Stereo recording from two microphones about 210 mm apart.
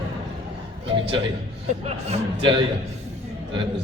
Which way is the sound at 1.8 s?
30° right (ahead or behind).